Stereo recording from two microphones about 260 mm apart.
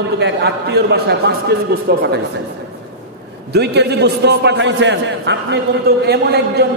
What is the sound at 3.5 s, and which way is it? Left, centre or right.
A man's voice, right.